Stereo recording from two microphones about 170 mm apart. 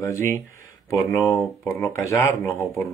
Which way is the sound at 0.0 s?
15° left (ahead or behind).